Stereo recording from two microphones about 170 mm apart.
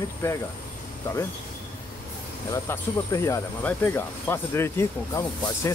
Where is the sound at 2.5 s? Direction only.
20° left (ahead or behind).